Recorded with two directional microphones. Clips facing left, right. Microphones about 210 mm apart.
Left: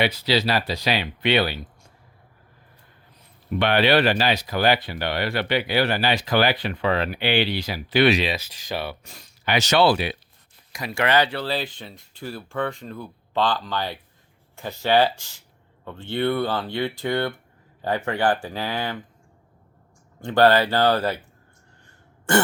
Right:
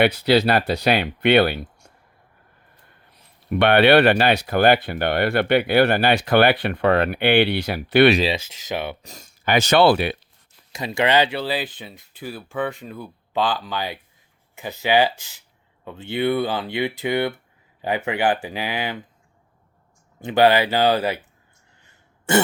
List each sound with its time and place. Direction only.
0.0 s speech: 55° right (ahead or behind)
3.5 s speech: 60° right (ahead or behind)
8.2 s speech: 25° right (ahead or behind)
9.0 s speech: 45° right (ahead or behind)
10.7 s speech: 25° right (ahead or behind)
20.3 s speech: 10° right (ahead or behind)